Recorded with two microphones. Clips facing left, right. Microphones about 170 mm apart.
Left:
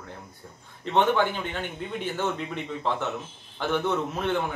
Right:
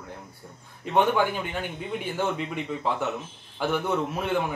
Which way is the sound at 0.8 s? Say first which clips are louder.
Even; 10° right (ahead or behind).